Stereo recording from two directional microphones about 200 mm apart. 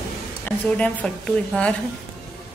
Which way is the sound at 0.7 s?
5° left (ahead or behind).